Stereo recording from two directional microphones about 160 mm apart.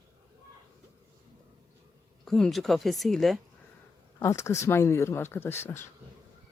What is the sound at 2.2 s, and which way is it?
Speech, 5° left (ahead or behind).